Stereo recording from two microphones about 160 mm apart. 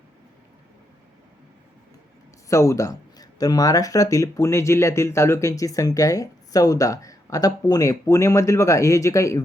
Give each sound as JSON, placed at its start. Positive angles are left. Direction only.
{"t": 2.5, "sound": "speech", "side_deg": 20}